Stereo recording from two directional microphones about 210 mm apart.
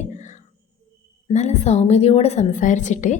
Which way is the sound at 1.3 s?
35° left (ahead or behind).